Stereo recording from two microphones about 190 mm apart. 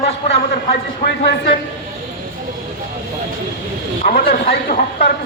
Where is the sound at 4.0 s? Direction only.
50° left (ahead or behind).